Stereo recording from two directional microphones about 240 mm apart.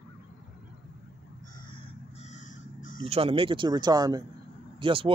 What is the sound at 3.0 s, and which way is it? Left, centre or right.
Speech, right.